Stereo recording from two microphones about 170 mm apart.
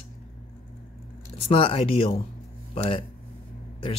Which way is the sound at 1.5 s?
30° left (ahead or behind).